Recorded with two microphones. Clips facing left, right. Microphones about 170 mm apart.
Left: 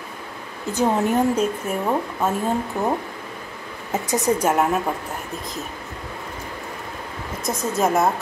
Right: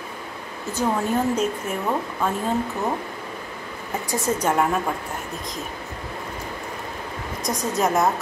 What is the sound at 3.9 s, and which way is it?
Speech, 20° left (ahead or behind).